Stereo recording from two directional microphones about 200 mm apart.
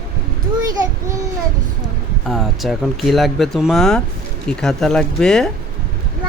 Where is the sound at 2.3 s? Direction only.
Centre (ahead or behind).